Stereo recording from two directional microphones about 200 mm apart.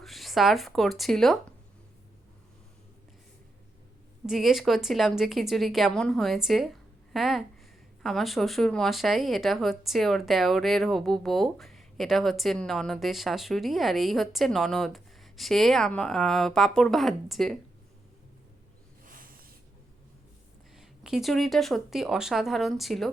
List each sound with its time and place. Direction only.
0.0 s speech: centre (ahead or behind)
4.3 s speech: centre (ahead or behind)
19.0 s a sound: 45° right (ahead or behind)
20.7 s speech: centre (ahead or behind)